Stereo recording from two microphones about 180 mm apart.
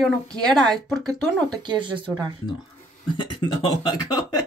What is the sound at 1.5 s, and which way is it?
Speech, 25° right (ahead or behind).